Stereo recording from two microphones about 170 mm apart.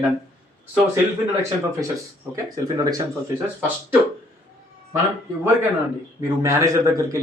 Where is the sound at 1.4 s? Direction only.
15° right (ahead or behind).